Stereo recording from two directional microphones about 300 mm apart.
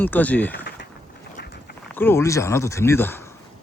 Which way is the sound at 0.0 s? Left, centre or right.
Centre.